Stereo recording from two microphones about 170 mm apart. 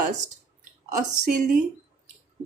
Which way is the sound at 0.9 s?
50° right (ahead or behind).